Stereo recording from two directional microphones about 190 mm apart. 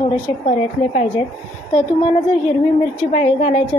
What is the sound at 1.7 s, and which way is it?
A woman's voice, 30° left (ahead or behind).